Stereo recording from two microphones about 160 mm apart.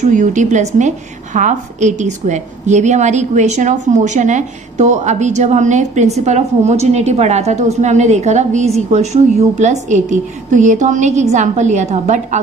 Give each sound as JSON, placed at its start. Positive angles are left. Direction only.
{"t": 0.0, "sound": "a woman's voice", "side_deg": -50}